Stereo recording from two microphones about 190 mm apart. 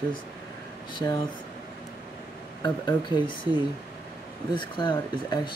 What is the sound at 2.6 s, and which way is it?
Speech, 25° left (ahead or behind).